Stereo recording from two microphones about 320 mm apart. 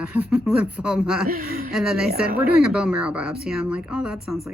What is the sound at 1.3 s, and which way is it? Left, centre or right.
Speech, right.